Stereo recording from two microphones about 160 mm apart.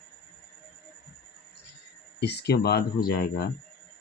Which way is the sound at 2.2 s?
85° left.